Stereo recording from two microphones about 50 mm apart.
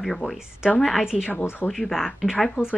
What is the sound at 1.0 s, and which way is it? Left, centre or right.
Speech, centre.